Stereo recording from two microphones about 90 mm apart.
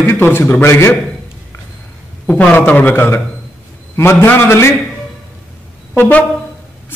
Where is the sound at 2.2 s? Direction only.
15° left (ahead or behind).